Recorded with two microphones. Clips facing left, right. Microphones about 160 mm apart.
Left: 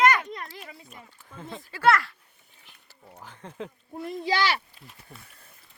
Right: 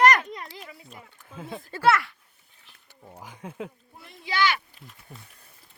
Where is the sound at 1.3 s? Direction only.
10° right (ahead or behind).